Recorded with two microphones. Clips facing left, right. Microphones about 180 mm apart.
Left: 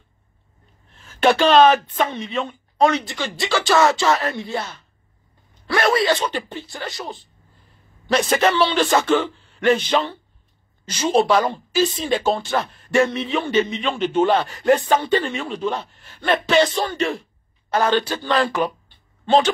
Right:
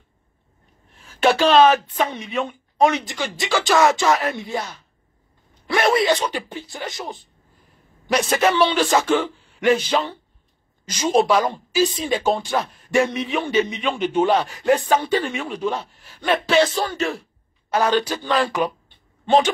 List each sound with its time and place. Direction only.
0.8 s speech: 10° right (ahead or behind)
4.0 s speech: centre (ahead or behind)
4.3 s a man's voice: 20° right (ahead or behind)
5.7 s a sound: 20° right (ahead or behind)
6.2 s a man's voice: 10° right (ahead or behind)
6.9 s speech: 20° right (ahead or behind)
8.1 s a man's voice: 10° right (ahead or behind)
12.5 s speech: centre (ahead or behind)
13.0 s a man's voice: 15° right (ahead or behind)